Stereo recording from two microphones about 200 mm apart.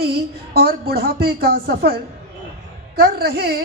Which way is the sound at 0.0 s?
50° right (ahead or behind).